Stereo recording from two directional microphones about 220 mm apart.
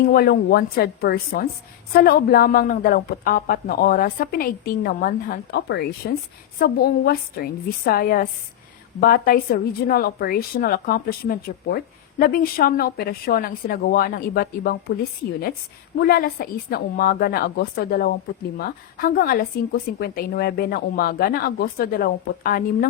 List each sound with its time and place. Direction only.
0.0 s a woman's voice: 45° left (ahead or behind)
16.0 s a woman's voice: 45° left (ahead or behind)